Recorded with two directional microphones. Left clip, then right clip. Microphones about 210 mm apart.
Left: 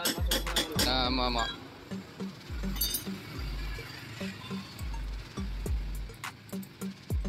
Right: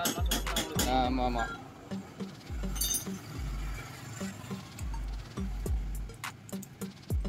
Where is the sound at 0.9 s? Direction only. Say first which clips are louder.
Right 3 dB; 15° right (ahead or behind).